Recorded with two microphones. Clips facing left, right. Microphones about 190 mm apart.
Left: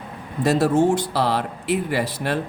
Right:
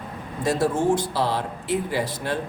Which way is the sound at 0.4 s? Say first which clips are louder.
Left 4 dB; 65° left (ahead or behind).